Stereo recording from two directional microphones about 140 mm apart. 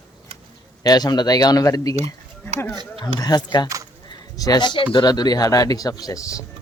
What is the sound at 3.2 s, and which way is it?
Speech, 30° left (ahead or behind).